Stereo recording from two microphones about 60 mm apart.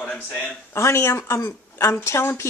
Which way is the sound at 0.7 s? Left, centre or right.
Left.